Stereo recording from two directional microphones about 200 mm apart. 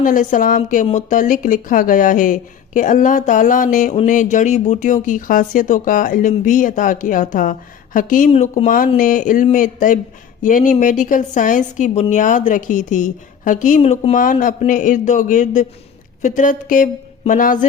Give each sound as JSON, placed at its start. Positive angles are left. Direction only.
{"t": 0.0, "sound": "a woman's voice", "side_deg": 40}